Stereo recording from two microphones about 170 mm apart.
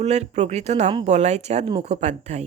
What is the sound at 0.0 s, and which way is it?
Speech, 40° right (ahead or behind).